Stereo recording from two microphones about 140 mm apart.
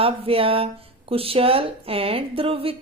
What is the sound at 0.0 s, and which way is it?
Speech, 40° right (ahead or behind).